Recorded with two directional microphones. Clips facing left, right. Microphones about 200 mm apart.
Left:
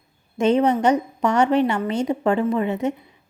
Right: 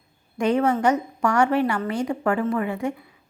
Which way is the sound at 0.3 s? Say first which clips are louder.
Left 3 dB; 20° left (ahead or behind).